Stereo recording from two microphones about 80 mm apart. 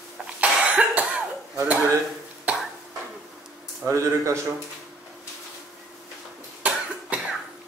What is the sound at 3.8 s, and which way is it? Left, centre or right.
Speech, right.